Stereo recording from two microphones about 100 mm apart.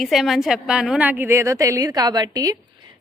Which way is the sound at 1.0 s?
15° right (ahead or behind).